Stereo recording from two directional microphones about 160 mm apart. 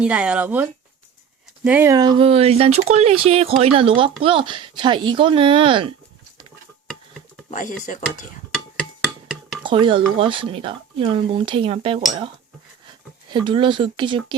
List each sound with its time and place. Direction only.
0.0 s speech: 5° right (ahead or behind)
1.9 s speech: 25° right (ahead or behind)
2.1 s speech: 35° right (ahead or behind)
7.5 s speech: 55° left (ahead or behind)
9.2 s dishes: centre (ahead or behind)
9.6 s speech: 30° right (ahead or behind)
13.3 s speech: 30° right (ahead or behind)